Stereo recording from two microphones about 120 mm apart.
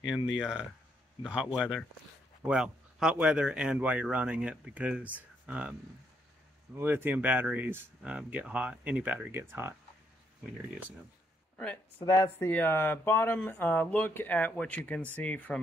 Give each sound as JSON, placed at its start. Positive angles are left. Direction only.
{"t": 0.0, "sound": "speech", "side_deg": -5}
{"t": 10.4, "sound": "speech", "side_deg": -5}
{"t": 11.5, "sound": "speech", "side_deg": 10}
{"t": 12.0, "sound": "speech", "side_deg": 25}